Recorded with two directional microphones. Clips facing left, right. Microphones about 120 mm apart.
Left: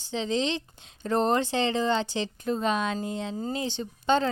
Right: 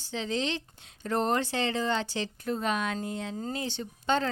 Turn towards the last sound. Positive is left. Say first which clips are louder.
# left 4 dB
turn(degrees=20)  # may be behind; listen again after turning